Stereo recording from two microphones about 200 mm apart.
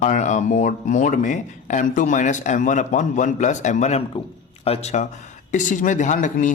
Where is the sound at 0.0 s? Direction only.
35° left (ahead or behind).